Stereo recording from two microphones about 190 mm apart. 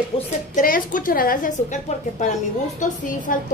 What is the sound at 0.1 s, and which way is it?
Speech, 30° left (ahead or behind).